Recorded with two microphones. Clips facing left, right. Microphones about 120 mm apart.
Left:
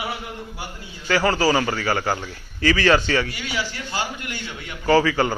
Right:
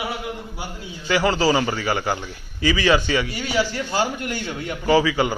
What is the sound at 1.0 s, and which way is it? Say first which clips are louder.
A man's voice: even; 20° right (ahead or behind).